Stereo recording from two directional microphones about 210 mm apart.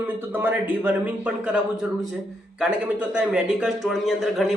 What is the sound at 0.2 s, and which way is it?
A man's voice, 10° right (ahead or behind).